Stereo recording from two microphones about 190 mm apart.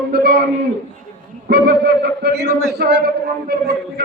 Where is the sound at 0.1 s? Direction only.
60° right (ahead or behind).